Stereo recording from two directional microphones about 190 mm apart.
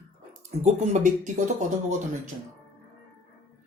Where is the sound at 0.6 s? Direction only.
40° right (ahead or behind).